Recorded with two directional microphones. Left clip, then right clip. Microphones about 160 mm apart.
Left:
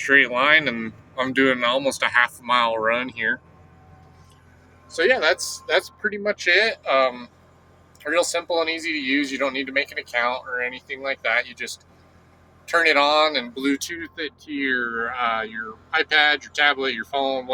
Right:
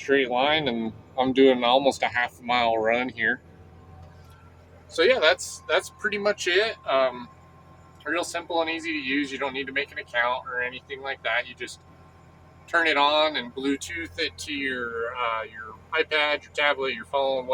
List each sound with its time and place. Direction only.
0.0 s speech: centre (ahead or behind)
4.9 s speech: 5° right (ahead or behind)
5.2 s speech: 10° left (ahead or behind)